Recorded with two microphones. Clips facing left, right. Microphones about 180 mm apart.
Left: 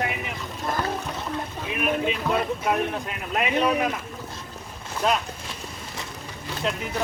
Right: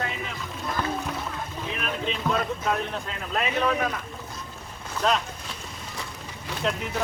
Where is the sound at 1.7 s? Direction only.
10° left (ahead or behind).